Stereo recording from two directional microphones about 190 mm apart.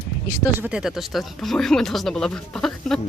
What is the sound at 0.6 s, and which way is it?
Speech, 5° right (ahead or behind).